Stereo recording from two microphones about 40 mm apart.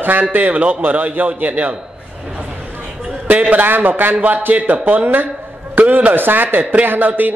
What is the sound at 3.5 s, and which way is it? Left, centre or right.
A man's voice, right.